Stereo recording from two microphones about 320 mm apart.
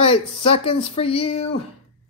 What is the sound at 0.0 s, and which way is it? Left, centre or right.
Speech, centre.